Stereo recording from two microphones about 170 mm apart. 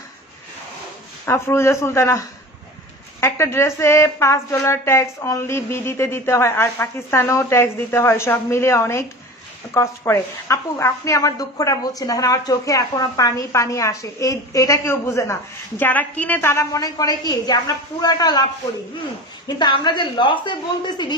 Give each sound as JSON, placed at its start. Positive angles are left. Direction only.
{"t": 1.2, "sound": "speech", "side_deg": 15}